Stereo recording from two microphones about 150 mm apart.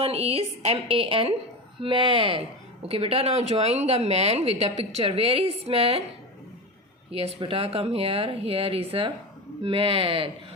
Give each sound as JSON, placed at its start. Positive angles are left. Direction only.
{"t": 0.0, "sound": "speech", "side_deg": -40}
{"t": 7.1, "sound": "speech", "side_deg": -40}